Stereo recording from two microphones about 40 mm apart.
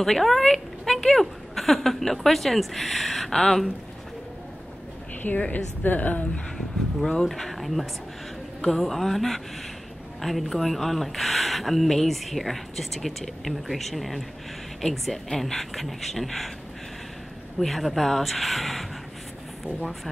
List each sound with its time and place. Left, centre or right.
0.0 s speech: centre
5.5 s a woman's voice: left
7.0 s speech: centre
17.6 s speech: centre